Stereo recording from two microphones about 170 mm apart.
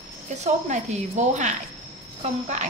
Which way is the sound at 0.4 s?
45° right (ahead or behind).